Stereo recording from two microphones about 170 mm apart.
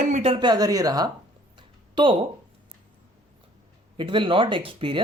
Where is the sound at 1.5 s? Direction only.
30° right (ahead or behind).